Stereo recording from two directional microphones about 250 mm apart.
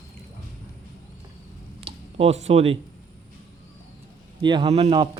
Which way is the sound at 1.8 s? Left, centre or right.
Right.